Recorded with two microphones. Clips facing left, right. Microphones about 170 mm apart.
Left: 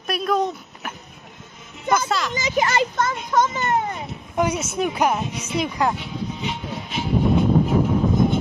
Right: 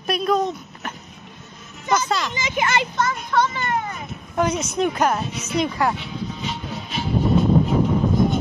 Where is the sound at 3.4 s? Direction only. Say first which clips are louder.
Left 2 dB; 25° left (ahead or behind).